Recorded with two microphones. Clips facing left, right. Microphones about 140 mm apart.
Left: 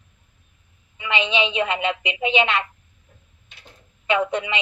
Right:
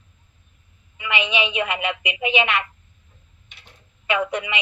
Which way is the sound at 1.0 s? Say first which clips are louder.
Left 1 dB; 25° left (ahead or behind).